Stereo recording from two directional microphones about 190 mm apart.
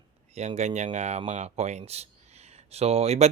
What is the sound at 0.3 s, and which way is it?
Speech, 35° right (ahead or behind).